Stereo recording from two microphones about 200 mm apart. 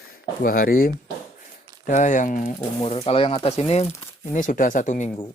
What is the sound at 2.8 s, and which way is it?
Speech, 30° left (ahead or behind).